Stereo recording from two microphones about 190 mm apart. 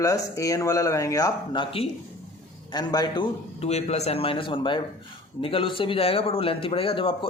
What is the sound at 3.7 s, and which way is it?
A man's voice, 35° left (ahead or behind).